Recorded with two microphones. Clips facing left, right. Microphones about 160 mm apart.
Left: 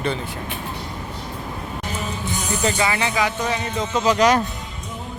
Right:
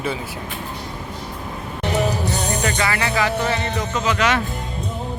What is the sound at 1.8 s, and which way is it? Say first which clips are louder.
Music: right 10 dB; 75° right (ahead or behind).